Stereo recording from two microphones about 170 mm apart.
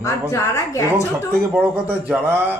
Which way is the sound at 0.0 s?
20° left (ahead or behind).